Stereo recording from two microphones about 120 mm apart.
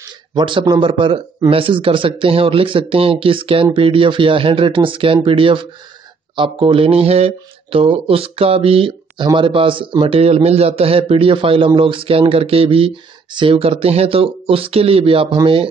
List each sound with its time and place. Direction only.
0.3 s a man's voice: 45° right (ahead or behind)